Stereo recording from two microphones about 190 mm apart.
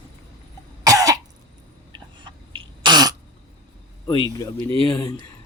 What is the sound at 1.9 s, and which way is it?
Throat clearing, 25° right (ahead or behind).